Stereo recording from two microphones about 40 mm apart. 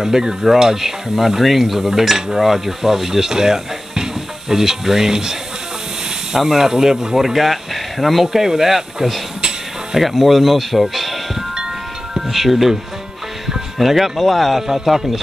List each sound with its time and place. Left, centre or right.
0.0 s stir: centre
9.9 s speech: centre
12.3 s speech: centre
13.7 s speech: centre